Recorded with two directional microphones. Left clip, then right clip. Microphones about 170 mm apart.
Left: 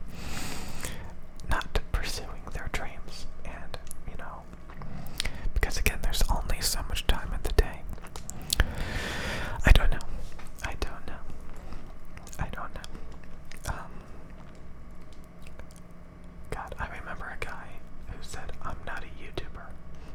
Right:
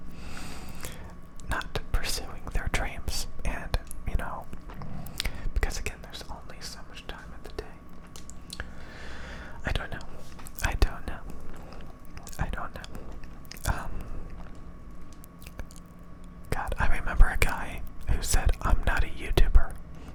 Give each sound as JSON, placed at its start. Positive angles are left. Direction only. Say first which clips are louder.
{"t": 0.2, "sound": "snort", "louder": "left 5 dB", "side_deg": 15}
{"t": 1.5, "sound": "whispering", "louder": "left 1 dB", "side_deg": 5}
{"t": 4.8, "sound": "whispering", "louder": "even", "side_deg": 0}
{"t": 5.8, "sound": "whispering", "louder": "left 8 dB", "side_deg": 20}
{"t": 10.6, "sound": "whispering", "louder": "right 5 dB", "side_deg": -10}
{"t": 12.4, "sound": "whispering", "louder": "right 2 dB", "side_deg": -5}
{"t": 16.5, "sound": "whispering", "louder": "right 5 dB", "side_deg": -10}